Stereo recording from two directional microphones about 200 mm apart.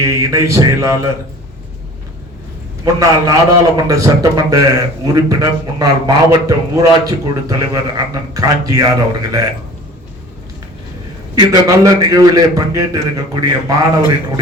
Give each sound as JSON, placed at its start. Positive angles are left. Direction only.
{"t": 0.0, "sound": "a man's voice", "side_deg": -15}
{"t": 2.8, "sound": "a man's voice", "side_deg": -15}
{"t": 11.3, "sound": "a man's voice", "side_deg": -20}